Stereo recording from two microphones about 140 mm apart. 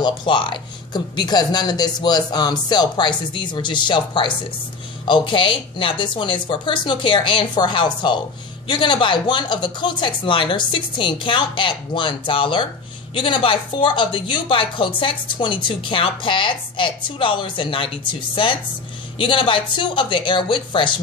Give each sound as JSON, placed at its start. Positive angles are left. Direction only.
{"t": 0.0, "sound": "speech", "side_deg": 35}